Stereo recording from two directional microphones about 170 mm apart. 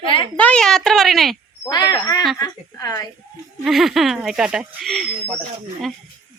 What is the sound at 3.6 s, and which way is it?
Speech, centre (ahead or behind).